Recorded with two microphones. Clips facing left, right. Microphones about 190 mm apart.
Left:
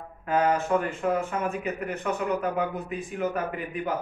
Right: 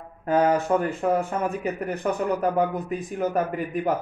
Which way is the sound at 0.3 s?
40° right (ahead or behind).